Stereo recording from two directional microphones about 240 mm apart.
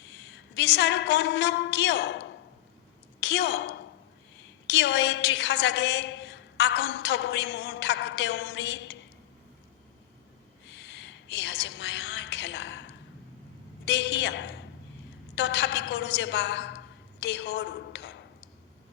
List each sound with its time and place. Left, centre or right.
0.0 s a woman's voice: left
10.7 s a woman's voice: left